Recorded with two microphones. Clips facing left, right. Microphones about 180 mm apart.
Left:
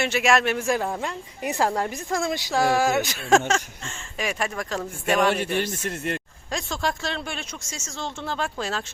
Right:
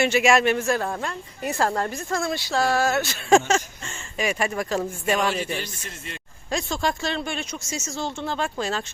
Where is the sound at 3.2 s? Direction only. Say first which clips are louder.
Right 5 dB; centre (ahead or behind).